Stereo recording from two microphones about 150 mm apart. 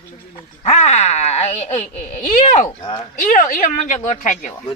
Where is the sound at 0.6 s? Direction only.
50° left (ahead or behind).